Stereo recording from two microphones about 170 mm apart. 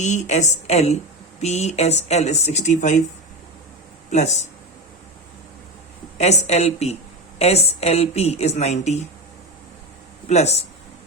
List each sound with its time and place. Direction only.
0.0 s a woman's voice: 45° left (ahead or behind)
4.1 s a woman's voice: 40° left (ahead or behind)
6.1 s speech: 40° left (ahead or behind)
10.2 s speech: 40° left (ahead or behind)